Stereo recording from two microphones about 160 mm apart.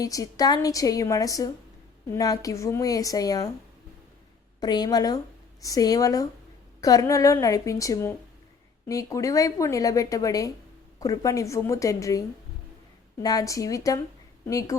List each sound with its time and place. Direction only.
0.0 s speech: 20° left (ahead or behind)
4.6 s speech: 25° left (ahead or behind)
13.2 s speech: 20° left (ahead or behind)